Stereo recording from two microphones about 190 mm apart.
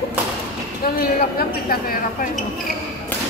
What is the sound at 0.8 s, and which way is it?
A woman's voice, 50° left (ahead or behind).